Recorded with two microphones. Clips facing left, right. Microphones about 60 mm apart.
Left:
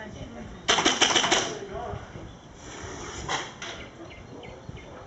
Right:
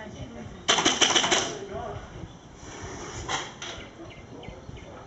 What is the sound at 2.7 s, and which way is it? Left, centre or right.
Vehicle, right.